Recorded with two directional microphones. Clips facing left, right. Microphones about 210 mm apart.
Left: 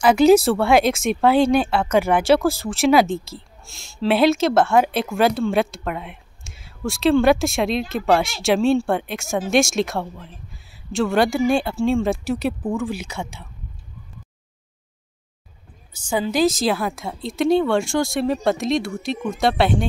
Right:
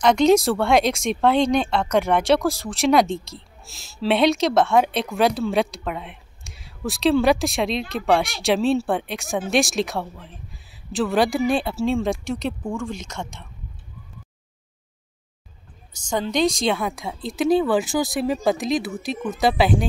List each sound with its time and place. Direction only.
0.0 s speech: 5° left (ahead or behind)
15.9 s speech: 5° left (ahead or behind)